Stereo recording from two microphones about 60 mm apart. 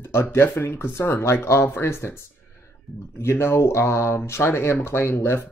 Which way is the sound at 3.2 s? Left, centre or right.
Left.